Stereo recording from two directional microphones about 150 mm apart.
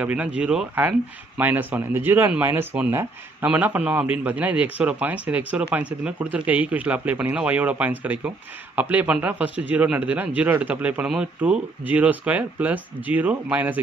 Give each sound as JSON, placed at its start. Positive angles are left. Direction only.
{"t": 0.0, "sound": "speech", "side_deg": -10}